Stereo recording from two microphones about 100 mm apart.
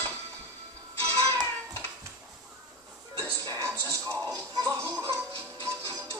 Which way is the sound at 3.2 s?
25° right (ahead or behind).